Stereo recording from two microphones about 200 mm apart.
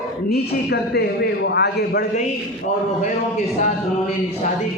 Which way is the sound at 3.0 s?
35° left (ahead or behind).